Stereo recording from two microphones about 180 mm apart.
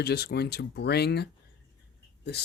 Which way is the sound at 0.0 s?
65° left (ahead or behind).